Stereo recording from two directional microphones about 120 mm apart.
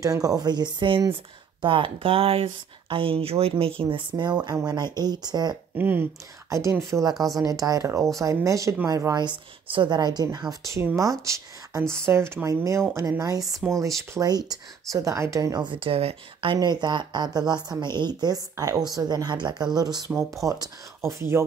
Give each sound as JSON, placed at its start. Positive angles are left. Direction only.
{"t": 0.0, "sound": "speech", "side_deg": -30}
{"t": 3.9, "sound": "speech", "side_deg": -40}
{"t": 5.8, "sound": "speech", "side_deg": -15}
{"t": 15.6, "sound": "speech", "side_deg": -45}
{"t": 16.5, "sound": "speech", "side_deg": -35}